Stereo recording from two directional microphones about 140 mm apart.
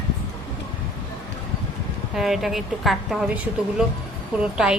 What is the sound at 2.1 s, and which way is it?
A woman's voice, 5° right (ahead or behind).